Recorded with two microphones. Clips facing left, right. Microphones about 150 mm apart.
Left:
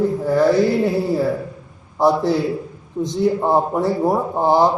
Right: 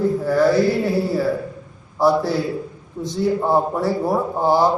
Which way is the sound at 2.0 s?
20° left (ahead or behind).